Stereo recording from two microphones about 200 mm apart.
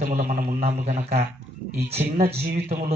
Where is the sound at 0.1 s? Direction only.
35° right (ahead or behind).